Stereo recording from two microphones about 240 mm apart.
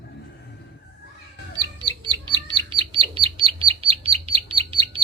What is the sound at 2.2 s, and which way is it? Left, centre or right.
Bird, centre.